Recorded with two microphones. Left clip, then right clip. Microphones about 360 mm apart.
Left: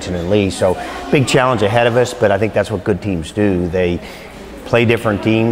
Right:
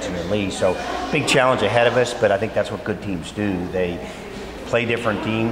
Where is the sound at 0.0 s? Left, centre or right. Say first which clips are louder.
Left 7 dB; left.